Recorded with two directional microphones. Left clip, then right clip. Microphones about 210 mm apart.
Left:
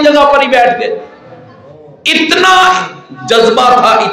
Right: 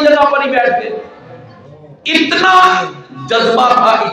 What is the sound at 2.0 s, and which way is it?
A man's voice, 45° left (ahead or behind).